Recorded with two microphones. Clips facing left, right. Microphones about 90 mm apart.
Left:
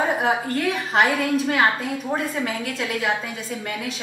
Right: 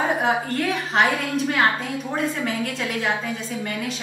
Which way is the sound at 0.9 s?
5° left (ahead or behind).